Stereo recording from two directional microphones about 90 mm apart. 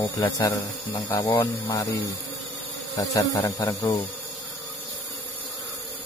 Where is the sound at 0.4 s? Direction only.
40° left (ahead or behind).